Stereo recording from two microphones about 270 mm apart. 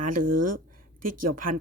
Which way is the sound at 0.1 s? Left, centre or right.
Right.